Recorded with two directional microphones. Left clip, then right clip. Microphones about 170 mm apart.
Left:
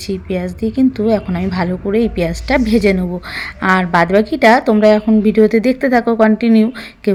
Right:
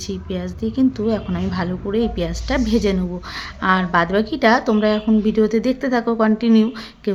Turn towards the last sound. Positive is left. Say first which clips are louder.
# left 6 dB
turn(degrees=15)  # may be behind; listen again after turning